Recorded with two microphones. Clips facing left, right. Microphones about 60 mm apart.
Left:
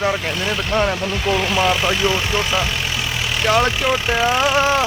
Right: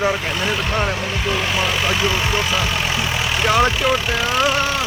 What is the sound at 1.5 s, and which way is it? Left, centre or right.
Speech, centre.